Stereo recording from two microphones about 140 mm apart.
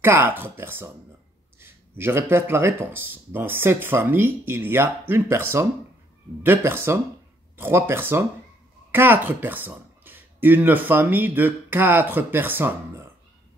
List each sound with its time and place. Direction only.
0.0 s speech: 15° right (ahead or behind)